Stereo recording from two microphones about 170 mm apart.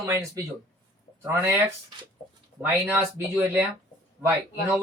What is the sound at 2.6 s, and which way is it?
Speech, 10° right (ahead or behind).